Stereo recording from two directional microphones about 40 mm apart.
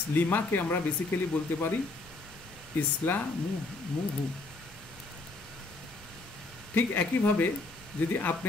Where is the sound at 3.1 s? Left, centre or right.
Left.